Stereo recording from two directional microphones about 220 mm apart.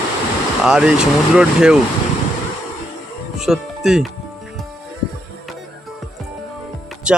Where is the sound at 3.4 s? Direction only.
Centre (ahead or behind).